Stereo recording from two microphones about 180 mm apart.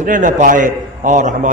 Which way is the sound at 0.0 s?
45° right (ahead or behind).